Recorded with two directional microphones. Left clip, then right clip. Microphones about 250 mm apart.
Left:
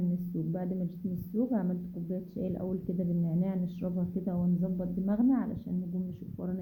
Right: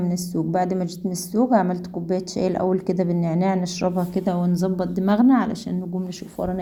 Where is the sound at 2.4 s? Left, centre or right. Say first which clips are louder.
Right 16 dB; centre.